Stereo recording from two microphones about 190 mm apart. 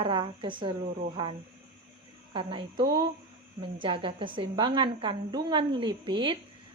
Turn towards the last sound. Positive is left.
turn(degrees=-25)  # may be behind; listen again after turning